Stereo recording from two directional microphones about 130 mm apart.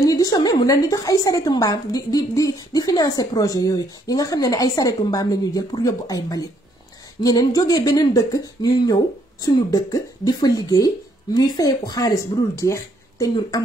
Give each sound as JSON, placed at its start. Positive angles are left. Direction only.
{"t": 0.0, "sound": "a woman's voice", "side_deg": 25}